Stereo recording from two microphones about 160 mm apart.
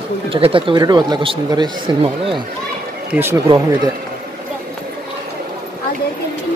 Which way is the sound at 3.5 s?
30° right (ahead or behind).